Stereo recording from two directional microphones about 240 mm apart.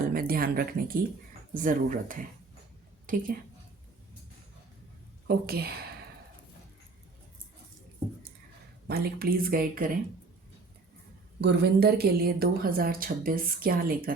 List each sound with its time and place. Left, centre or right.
0.1 s a woman's voice: right
5.3 s a woman's voice: right
8.9 s a woman's voice: right
11.3 s a woman's voice: right